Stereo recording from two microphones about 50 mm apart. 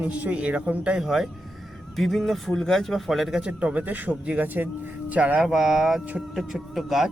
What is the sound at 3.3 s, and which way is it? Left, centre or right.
Speech, right.